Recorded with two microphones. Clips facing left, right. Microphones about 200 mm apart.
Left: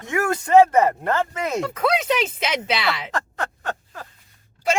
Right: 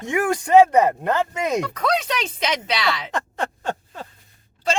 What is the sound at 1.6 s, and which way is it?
Speech, 5° left (ahead or behind).